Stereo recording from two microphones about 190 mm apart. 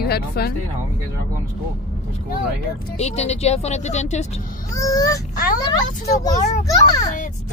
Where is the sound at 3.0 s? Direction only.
35° left (ahead or behind).